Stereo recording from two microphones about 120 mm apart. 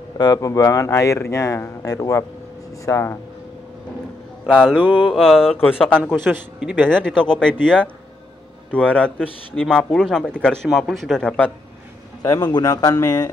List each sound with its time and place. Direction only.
0.2 s speech: 30° left (ahead or behind)
4.6 s mantra: 10° right (ahead or behind)
5.1 s a man's voice: centre (ahead or behind)
6.6 s mantra: 10° right (ahead or behind)
6.9 s a man's voice: 5° left (ahead or behind)
12.2 s speech: 30° left (ahead or behind)